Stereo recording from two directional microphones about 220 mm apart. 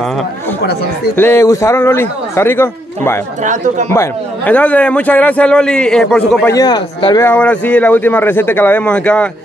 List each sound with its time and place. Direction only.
1.1 s a man's voice: 10° left (ahead or behind)
3.4 s speech: 35° right (ahead or behind)
3.9 s a man's voice: 10° left (ahead or behind)
6.5 s speech: 20° left (ahead or behind)
7.2 s a man's voice: 5° left (ahead or behind)